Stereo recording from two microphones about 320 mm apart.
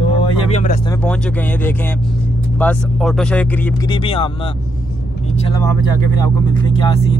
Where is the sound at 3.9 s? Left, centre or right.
Centre.